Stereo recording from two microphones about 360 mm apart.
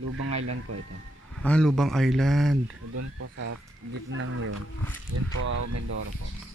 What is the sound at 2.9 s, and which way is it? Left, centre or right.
Speech, right.